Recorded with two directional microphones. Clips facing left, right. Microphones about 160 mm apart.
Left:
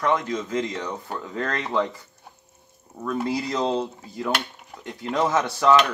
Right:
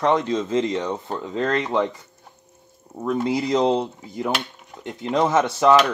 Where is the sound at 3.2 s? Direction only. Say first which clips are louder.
Right 6 dB; 20° right (ahead or behind).